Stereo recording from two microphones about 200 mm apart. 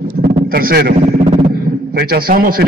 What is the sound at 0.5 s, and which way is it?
Speech, 50° right (ahead or behind).